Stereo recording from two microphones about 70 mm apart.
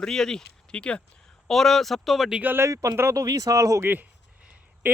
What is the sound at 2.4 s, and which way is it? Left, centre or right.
Speech, right.